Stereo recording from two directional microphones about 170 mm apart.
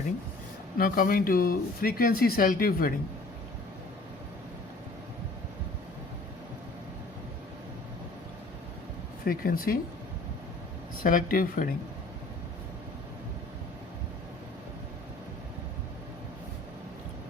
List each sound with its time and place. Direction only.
0.8 s speech: 55° left (ahead or behind)
9.2 s speech: 60° left (ahead or behind)
11.0 s speech: 55° left (ahead or behind)